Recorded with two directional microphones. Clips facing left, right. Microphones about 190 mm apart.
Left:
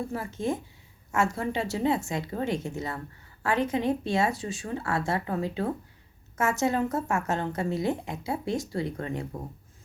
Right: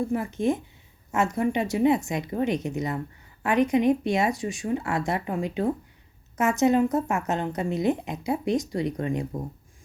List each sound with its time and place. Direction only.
0.1 s a woman's voice: 20° right (ahead or behind)